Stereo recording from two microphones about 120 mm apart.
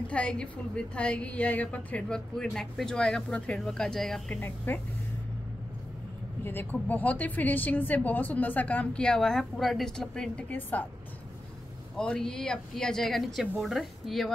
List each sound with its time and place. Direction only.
0.1 s a woman's voice: 10° left (ahead or behind)
4.7 s a woman's voice: 15° left (ahead or behind)
6.4 s a woman's voice: 15° left (ahead or behind)
12.0 s a woman's voice: 5° left (ahead or behind)